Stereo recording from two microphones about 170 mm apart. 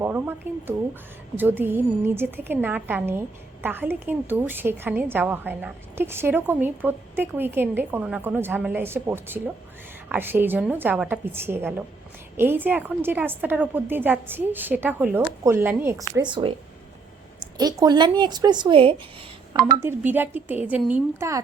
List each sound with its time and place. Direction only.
0.0 s a sound: 10° right (ahead or behind)
1.4 s a woman's voice: 10° right (ahead or behind); by 16.5 s 25° right (ahead or behind)
17.6 s a woman's voice: 20° right (ahead or behind)
19.8 s a woman's voice: 10° right (ahead or behind)